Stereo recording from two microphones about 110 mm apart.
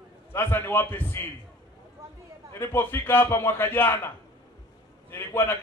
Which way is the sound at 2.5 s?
20° left (ahead or behind).